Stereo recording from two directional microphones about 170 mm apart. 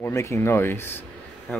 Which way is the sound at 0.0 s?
15° left (ahead or behind).